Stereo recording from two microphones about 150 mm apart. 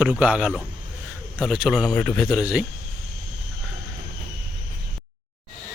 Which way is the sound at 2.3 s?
5° right (ahead or behind).